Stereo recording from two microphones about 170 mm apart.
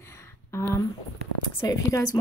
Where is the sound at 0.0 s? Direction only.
15° left (ahead or behind).